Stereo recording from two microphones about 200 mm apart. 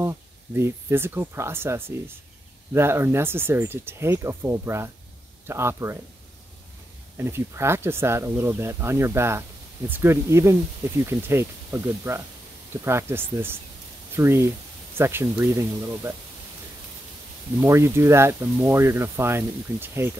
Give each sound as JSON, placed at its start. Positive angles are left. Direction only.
{"t": 0.0, "sound": "speech", "side_deg": -15}
{"t": 7.2, "sound": "speech", "side_deg": -10}
{"t": 17.6, "sound": "speech", "side_deg": -15}